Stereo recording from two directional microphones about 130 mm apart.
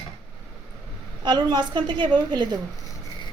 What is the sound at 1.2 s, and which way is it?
A woman's voice, 35° right (ahead or behind).